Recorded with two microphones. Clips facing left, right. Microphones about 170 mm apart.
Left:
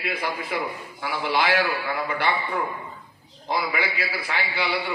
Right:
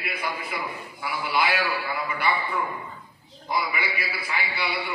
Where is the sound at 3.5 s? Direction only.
65° left (ahead or behind).